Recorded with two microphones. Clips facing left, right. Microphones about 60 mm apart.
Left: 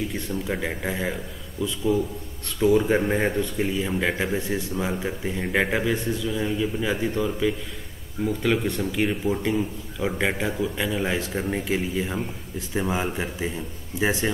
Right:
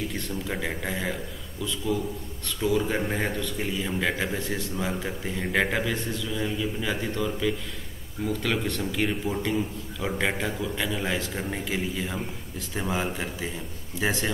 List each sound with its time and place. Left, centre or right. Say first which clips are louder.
0.1 s speech: left 3 dB; centre
11.6 s speech: left 4 dB; centre